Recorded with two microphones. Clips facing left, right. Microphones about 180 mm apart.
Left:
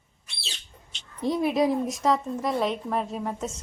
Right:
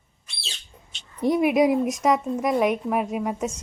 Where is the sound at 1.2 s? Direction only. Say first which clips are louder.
Right 4 dB; 15° right (ahead or behind).